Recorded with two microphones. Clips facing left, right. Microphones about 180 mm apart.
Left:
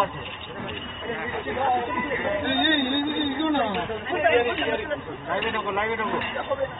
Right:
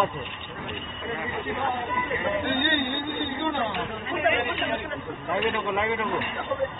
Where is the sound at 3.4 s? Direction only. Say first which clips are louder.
Left 5 dB; 55° left (ahead or behind).